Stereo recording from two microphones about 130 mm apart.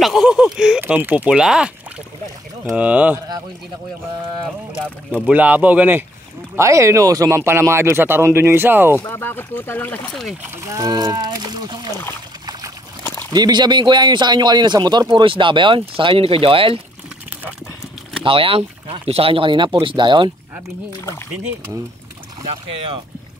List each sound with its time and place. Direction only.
0.0 s speech: centre (ahead or behind)
2.7 s speech: 10° right (ahead or behind)
5.2 s speech: 10° right (ahead or behind)
8.9 s speech: 20° left (ahead or behind)
10.5 s a man's voice: 25° right (ahead or behind)
13.0 s a sound: 20° left (ahead or behind)
13.3 s a man's voice: 35° right (ahead or behind)
18.2 s a man's voice: 45° right (ahead or behind)